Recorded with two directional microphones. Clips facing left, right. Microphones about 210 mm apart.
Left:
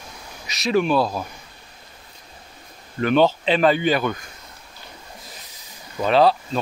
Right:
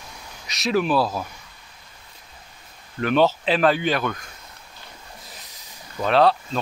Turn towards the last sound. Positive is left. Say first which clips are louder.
# left 1 dB
turn(degrees=0)  # may be behind; listen again after turning